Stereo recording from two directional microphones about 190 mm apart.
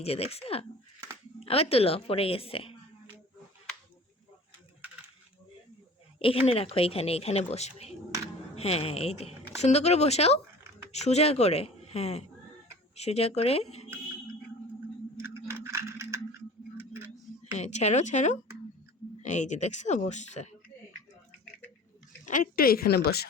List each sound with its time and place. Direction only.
0.0 s a woman's voice: 30° left (ahead or behind)
6.1 s speech: 30° left (ahead or behind)
15.2 s a sound: 15° right (ahead or behind)
17.4 s speech: 35° left (ahead or behind)
22.3 s a woman's voice: 50° left (ahead or behind)